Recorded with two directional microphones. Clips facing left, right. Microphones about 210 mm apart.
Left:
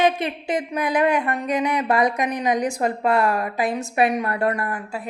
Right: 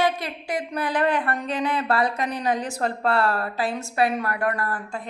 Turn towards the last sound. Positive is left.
turn(degrees=10)  # may be behind; listen again after turning